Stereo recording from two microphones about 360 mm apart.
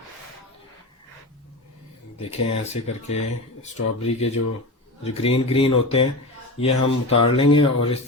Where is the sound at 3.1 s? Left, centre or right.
Centre.